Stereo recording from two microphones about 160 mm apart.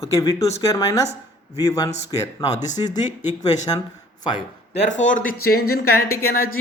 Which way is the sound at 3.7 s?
25° left (ahead or behind).